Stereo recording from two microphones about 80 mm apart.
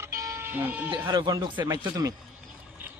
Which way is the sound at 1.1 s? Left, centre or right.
Right.